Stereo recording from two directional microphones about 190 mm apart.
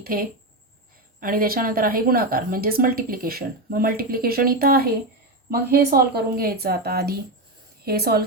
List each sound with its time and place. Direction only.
0.0 s a woman's voice: 50° right (ahead or behind)